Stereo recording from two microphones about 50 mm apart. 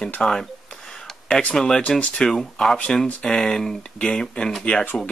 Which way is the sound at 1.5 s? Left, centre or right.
Centre.